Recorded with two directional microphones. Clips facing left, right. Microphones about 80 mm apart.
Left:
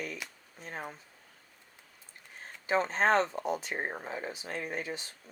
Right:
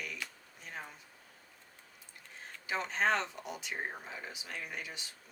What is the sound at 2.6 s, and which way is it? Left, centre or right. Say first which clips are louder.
Speech: left 5 dB; left.